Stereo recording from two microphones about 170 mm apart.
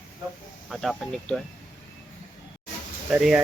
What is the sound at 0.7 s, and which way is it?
Speech, centre (ahead or behind).